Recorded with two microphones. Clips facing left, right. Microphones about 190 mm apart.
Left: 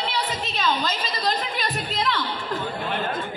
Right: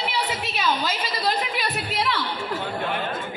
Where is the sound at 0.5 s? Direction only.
10° right (ahead or behind).